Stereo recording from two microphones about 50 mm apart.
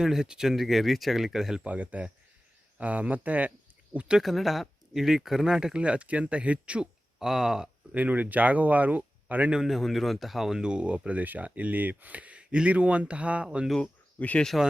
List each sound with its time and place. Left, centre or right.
0.0 s speech: centre
1.6 s speech: right
4.2 s speech: centre
5.8 s speech: right
7.2 s speech: centre
7.9 s a man's voice: right
9.6 s speech: centre; by 13.7 s right
13.8 s a sound: left